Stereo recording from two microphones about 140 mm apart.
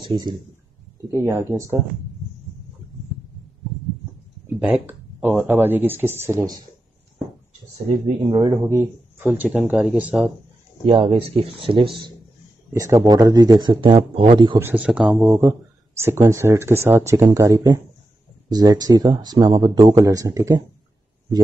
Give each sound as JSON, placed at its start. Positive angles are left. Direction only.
{"t": 0.0, "sound": "speech", "side_deg": -35}
{"t": 1.1, "sound": "speech", "side_deg": -20}
{"t": 4.6, "sound": "speech", "side_deg": 0}
{"t": 4.8, "sound": "speech", "side_deg": -15}
{"t": 7.9, "sound": "speech", "side_deg": -40}
{"t": 8.5, "sound": "speech", "side_deg": -25}
{"t": 10.9, "sound": "speech", "side_deg": -40}
{"t": 12.7, "sound": "speech", "side_deg": -25}
{"t": 14.6, "sound": "speech", "side_deg": -10}